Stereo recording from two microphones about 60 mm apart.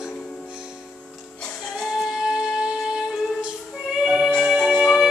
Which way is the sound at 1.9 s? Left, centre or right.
Centre.